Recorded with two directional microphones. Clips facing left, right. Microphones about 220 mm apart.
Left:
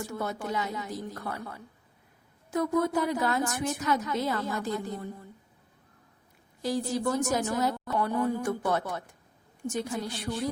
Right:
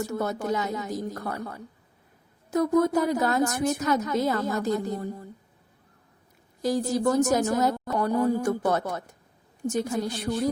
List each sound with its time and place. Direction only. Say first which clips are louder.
0.0 s a woman's voice: right 5 dB; 40° right (ahead or behind)
6.6 s a woman's voice: right 4 dB; 45° right (ahead or behind)